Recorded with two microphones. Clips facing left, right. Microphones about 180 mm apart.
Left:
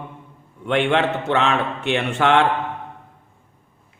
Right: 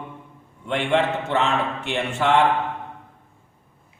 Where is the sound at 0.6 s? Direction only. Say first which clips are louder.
Left 2 dB; 70° left (ahead or behind).